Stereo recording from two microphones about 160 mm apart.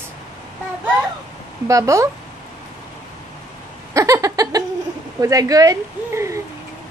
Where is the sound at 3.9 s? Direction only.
20° right (ahead or behind).